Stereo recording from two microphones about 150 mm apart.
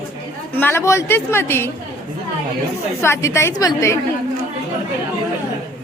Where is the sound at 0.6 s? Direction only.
15° left (ahead or behind).